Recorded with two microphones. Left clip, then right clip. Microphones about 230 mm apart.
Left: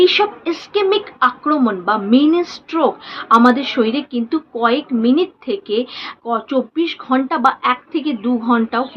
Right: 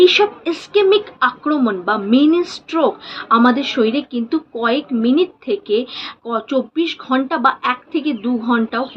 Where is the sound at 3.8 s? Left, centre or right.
Centre.